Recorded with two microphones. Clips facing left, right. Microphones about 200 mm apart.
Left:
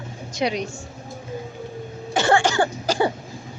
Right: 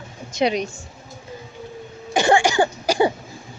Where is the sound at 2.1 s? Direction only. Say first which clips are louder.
Right 2 dB; 15° right (ahead or behind).